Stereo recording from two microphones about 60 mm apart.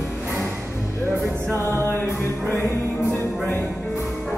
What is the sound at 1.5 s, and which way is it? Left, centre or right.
Music, left.